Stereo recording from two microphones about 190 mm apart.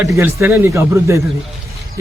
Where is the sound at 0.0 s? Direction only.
15° right (ahead or behind).